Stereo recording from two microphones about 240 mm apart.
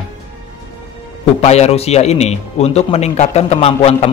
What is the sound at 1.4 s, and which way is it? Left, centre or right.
A man's voice, left.